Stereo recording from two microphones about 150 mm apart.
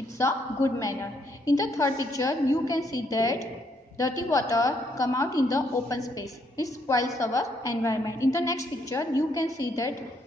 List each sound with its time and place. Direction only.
0.2 s a woman's voice: 20° left (ahead or behind)